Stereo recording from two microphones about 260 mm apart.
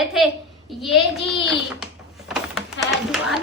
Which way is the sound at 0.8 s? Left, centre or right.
Centre.